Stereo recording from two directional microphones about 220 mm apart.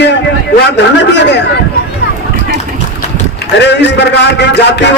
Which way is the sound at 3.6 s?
50° left (ahead or behind).